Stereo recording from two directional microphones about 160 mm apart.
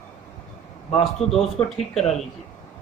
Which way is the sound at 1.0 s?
Centre (ahead or behind).